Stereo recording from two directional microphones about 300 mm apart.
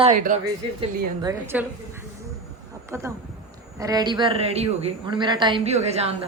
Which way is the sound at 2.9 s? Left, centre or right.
Centre.